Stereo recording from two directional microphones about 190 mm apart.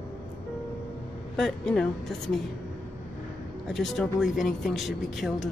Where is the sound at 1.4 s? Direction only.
5° left (ahead or behind).